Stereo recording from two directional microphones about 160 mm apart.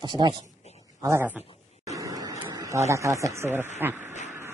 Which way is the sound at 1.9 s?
20° right (ahead or behind).